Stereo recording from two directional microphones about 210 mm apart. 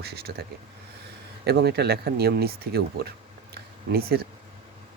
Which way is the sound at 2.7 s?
50° right (ahead or behind).